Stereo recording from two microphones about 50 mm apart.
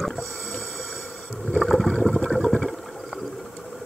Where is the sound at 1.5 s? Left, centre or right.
Centre.